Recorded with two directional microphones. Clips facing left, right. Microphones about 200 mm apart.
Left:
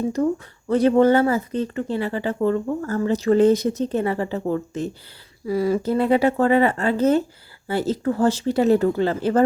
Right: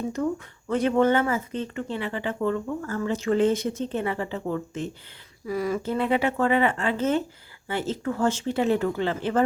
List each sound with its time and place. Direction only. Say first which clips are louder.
0.2 s speech: left 5 dB; 35° left (ahead or behind)